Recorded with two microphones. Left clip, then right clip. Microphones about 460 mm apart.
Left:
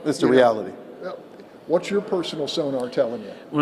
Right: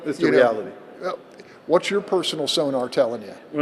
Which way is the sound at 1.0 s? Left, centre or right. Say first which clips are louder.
Right 6 dB; right.